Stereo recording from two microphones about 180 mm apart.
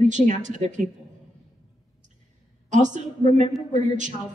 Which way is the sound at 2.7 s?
45° right (ahead or behind).